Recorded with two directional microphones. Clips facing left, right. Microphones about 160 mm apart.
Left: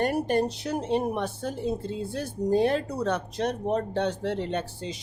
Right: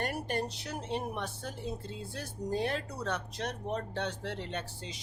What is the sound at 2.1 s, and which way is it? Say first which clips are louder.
Speech: left 10 dB; 30° left (ahead or behind).